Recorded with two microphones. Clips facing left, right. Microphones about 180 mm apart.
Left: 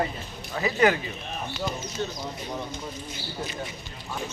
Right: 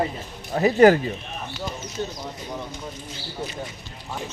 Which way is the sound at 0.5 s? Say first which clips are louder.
Right 8 dB; 40° right (ahead or behind).